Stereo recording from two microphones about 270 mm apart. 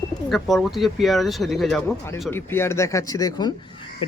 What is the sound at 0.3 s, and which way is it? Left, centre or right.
Speech, centre.